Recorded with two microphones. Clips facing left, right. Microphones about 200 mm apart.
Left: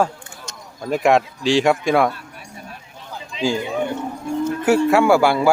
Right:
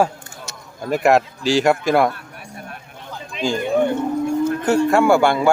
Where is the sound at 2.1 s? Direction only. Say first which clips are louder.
Right 1 dB; 60° right (ahead or behind).